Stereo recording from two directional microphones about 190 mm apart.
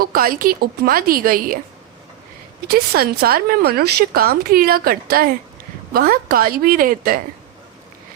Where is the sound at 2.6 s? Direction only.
55° right (ahead or behind).